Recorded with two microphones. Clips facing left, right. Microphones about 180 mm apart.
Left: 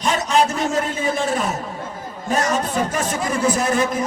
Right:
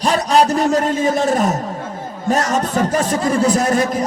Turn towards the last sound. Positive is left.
turn(degrees=-40)  # may be behind; listen again after turning